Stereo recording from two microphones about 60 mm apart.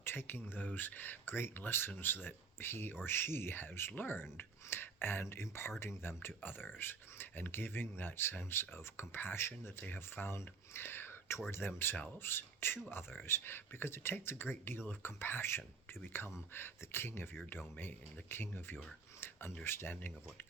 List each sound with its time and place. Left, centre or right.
0.0 s speech: left
19.2 s a sound: left
19.6 s speech: left